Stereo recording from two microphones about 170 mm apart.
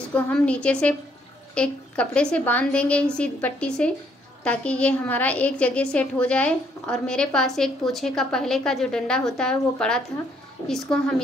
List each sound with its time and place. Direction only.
0.1 s a woman's voice: 5° left (ahead or behind)